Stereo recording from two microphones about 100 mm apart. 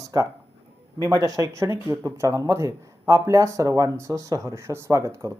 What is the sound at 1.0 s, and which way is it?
Speech, 35° right (ahead or behind).